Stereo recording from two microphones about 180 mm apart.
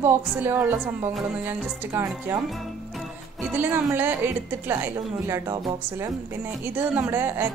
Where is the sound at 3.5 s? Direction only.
10° right (ahead or behind).